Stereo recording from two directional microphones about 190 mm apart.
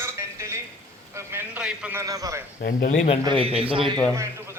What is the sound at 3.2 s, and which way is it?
Speech, 30° right (ahead or behind).